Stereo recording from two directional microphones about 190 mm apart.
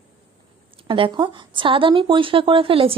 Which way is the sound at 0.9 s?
25° right (ahead or behind).